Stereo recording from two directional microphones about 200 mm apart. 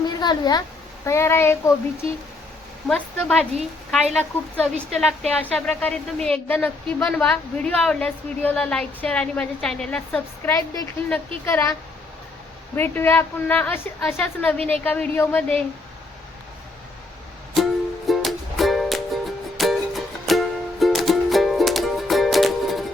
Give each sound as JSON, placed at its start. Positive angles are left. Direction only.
{"t": 0.1, "sound": "a sound", "side_deg": 20}
{"t": 1.0, "sound": "a woman's voice", "side_deg": 15}
{"t": 2.8, "sound": "speech", "side_deg": 5}
{"t": 10.5, "sound": "a woman's voice", "side_deg": 15}
{"t": 18.1, "sound": "music", "side_deg": 0}